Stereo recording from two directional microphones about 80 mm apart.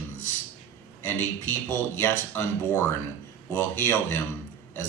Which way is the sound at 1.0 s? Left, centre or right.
Left.